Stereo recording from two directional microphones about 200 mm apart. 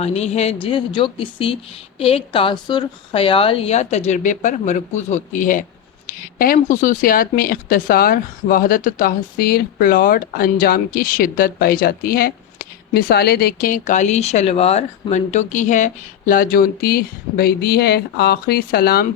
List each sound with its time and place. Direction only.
0.0 s a woman's voice: 30° left (ahead or behind); by 19.0 s 50° left (ahead or behind)